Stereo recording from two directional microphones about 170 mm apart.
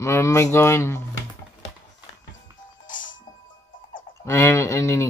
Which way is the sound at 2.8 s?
50° left (ahead or behind).